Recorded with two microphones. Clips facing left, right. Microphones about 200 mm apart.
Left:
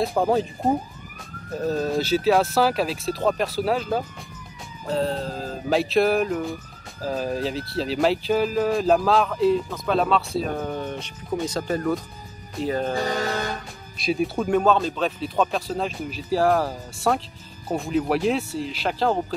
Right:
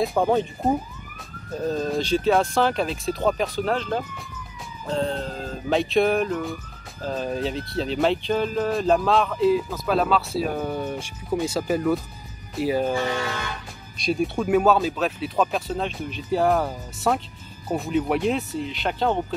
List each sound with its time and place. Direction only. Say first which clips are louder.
0.0 s speech: even; centre (ahead or behind)
1.7 s speech: left 1 dB; 5° left (ahead or behind)
12.9 s speech: left 1 dB; 40° left (ahead or behind)
13.9 s speech: even; centre (ahead or behind)